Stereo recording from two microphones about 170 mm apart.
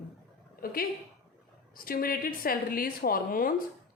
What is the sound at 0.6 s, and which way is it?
Speech, 60° left (ahead or behind).